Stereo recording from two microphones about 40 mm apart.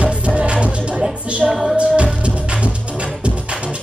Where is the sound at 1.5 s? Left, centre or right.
Centre.